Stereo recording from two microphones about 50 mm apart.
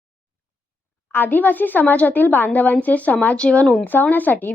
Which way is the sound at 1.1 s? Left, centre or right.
Left.